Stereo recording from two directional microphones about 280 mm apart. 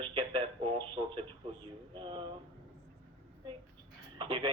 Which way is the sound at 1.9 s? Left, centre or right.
Centre.